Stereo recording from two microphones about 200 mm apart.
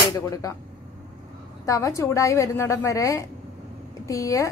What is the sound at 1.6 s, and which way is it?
A woman's voice, 15° left (ahead or behind).